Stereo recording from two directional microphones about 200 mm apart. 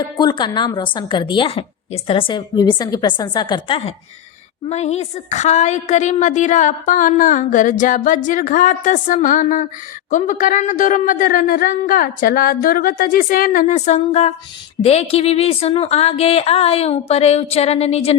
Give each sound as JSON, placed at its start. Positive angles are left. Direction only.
{"t": 0.2, "sound": "a woman's voice", "side_deg": 20}